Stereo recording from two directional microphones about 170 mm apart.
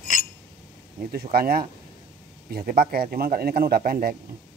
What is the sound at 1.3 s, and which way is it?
Speech, 60° right (ahead or behind).